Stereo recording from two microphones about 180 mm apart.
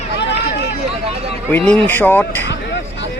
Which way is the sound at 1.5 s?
10° left (ahead or behind).